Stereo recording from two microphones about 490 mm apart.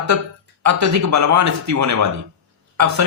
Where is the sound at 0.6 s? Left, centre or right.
Right.